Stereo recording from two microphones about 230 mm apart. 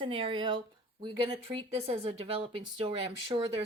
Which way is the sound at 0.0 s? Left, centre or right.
Right.